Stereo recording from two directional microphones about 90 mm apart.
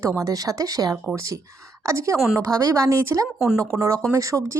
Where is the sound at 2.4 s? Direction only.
40° right (ahead or behind).